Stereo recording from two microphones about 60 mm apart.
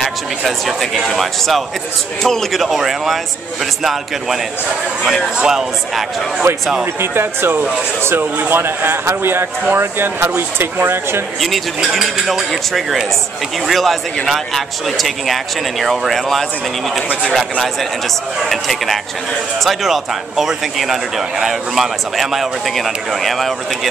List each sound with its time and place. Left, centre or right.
0.5 s speech: centre
5.4 s speech: centre
6.5 s speech: right
6.8 s speech: right
11.4 s speech: centre